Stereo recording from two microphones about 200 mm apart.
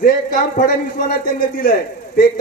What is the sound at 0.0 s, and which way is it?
A man's voice, 45° left (ahead or behind).